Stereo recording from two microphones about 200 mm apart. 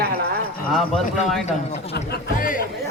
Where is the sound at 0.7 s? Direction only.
Centre (ahead or behind).